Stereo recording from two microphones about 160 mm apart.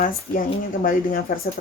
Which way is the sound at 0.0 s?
60° left (ahead or behind).